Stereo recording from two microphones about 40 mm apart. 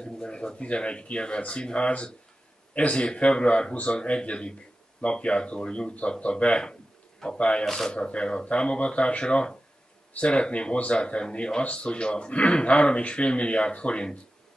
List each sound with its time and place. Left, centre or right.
0.0 s a man's voice: left
3.0 s speech: left
7.6 s speech: centre
7.9 s speech: left